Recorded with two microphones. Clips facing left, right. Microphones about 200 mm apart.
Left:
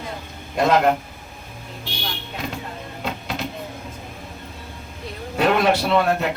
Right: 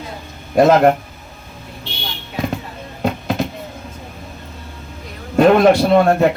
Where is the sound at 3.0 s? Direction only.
50° right (ahead or behind).